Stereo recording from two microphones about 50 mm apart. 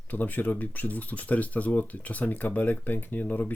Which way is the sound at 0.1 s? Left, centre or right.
Left.